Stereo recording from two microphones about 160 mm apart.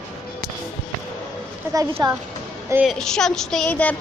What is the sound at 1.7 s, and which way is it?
Speech, 20° right (ahead or behind).